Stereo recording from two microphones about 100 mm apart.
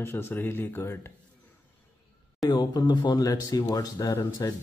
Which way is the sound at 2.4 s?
40° left (ahead or behind).